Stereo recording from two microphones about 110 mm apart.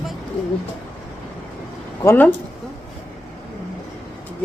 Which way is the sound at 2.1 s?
15° left (ahead or behind).